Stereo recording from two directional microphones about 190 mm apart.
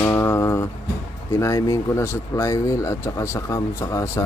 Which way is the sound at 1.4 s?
15° left (ahead or behind).